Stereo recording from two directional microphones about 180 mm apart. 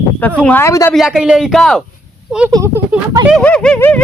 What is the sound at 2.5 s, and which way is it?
Speech, 15° right (ahead or behind).